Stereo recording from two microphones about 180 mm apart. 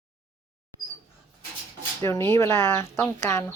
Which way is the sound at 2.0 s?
15° left (ahead or behind).